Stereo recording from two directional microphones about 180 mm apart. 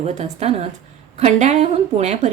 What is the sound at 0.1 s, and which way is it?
A woman's voice, 35° right (ahead or behind).